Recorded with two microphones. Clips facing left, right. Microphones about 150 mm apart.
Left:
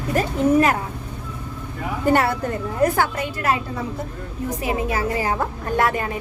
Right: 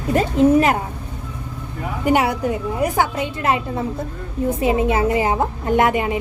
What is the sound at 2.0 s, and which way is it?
A woman's voice, 15° right (ahead or behind).